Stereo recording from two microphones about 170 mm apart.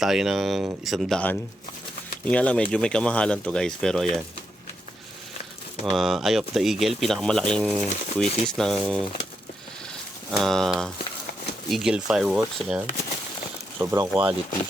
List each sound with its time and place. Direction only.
0.0 s speech: 5° right (ahead or behind)
6.0 s speech: centre (ahead or behind)
10.3 s speech: centre (ahead or behind)
13.7 s speech: 15° right (ahead or behind)